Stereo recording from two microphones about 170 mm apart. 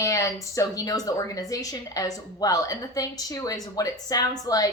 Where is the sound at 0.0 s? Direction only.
20° left (ahead or behind).